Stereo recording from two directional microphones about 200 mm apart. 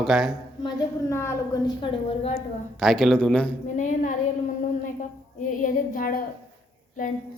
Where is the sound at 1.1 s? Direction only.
15° left (ahead or behind); by 2.4 s 30° left (ahead or behind).